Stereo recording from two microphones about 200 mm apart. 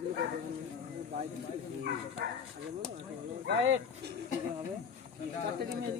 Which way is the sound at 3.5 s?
70° right (ahead or behind).